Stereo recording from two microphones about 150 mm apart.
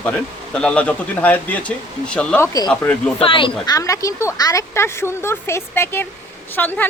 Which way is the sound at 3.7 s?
20° left (ahead or behind).